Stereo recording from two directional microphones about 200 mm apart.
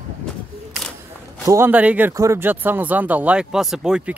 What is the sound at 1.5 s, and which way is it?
Speech, 10° right (ahead or behind).